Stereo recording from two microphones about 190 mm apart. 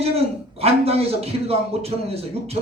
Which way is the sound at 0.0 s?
30° right (ahead or behind).